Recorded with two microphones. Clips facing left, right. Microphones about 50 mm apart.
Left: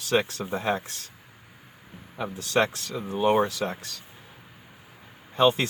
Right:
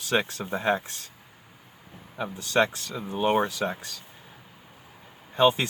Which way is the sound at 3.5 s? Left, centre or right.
Centre.